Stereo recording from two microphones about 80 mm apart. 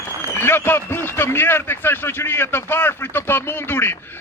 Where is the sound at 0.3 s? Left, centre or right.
Left.